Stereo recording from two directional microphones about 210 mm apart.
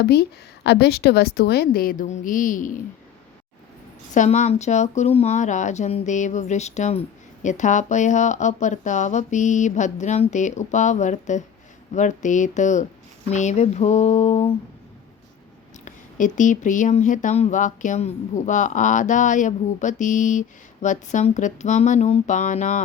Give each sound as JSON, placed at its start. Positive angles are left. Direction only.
{"t": 0.0, "sound": "a woman's voice", "side_deg": 50}
{"t": 4.1, "sound": "speech", "side_deg": 35}
{"t": 15.8, "sound": "speech", "side_deg": 35}